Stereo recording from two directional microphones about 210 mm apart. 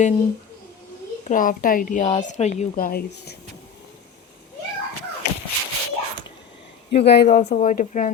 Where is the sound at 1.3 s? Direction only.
40° left (ahead or behind).